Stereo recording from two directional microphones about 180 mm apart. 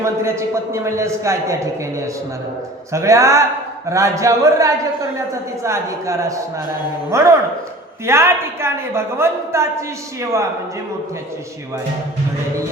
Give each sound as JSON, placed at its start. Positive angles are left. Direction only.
{"t": 0.0, "sound": "a man's voice", "side_deg": -15}